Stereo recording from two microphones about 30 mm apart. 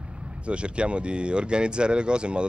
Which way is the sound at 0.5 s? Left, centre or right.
Right.